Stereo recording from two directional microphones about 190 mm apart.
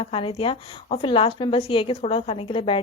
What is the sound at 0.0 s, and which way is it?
A woman's voice, 30° left (ahead or behind).